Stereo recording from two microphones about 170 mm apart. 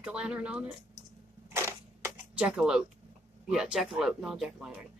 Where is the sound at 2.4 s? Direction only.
5° right (ahead or behind).